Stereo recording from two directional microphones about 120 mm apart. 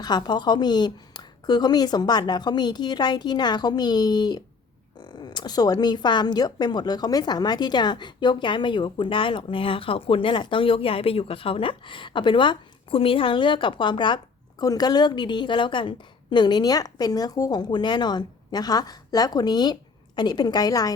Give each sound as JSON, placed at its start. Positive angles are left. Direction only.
{"t": 0.0, "sound": "a woman's voice", "side_deg": 35}